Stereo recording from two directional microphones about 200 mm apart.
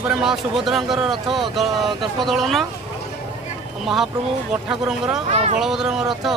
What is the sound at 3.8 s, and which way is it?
Speech, centre (ahead or behind).